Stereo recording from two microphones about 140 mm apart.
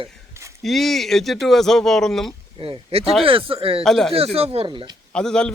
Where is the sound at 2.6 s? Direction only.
45° right (ahead or behind).